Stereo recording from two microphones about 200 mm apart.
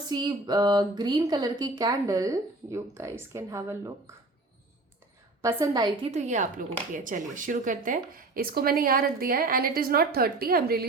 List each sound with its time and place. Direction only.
0.1 s speech: 20° right (ahead or behind)
5.4 s speech: 15° right (ahead or behind)
6.1 s speech: 35° right (ahead or behind)